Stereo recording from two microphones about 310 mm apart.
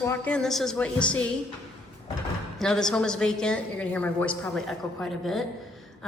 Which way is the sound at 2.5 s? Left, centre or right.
Centre.